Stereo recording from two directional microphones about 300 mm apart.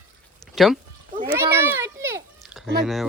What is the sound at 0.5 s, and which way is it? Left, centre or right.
Speech, centre.